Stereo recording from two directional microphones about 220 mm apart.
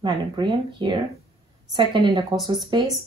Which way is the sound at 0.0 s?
20° right (ahead or behind).